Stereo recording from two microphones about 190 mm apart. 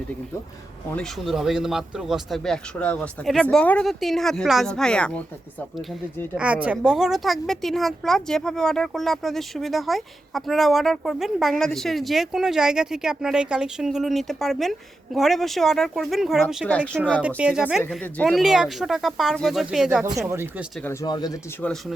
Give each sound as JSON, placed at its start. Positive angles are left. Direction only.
{"t": 0.9, "sound": "a woman's voice", "side_deg": 5}
{"t": 6.3, "sound": "a woman's voice", "side_deg": -5}
{"t": 20.7, "sound": "speech", "side_deg": 10}
{"t": 21.6, "sound": "a woman's voice", "side_deg": 0}